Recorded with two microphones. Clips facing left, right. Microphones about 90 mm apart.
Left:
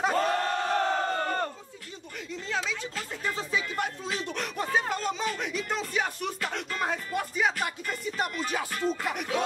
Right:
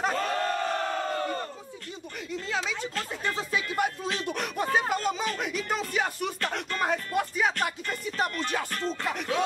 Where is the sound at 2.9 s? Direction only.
5° left (ahead or behind).